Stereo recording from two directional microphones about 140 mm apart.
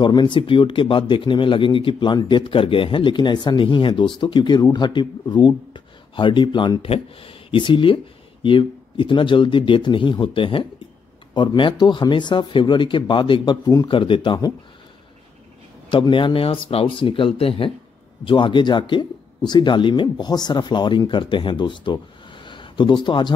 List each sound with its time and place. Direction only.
0.0 s speech: 35° left (ahead or behind)
15.9 s speech: 35° left (ahead or behind)